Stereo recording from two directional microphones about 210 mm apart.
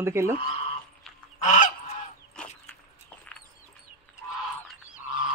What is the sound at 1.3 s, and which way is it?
Goose, 35° left (ahead or behind).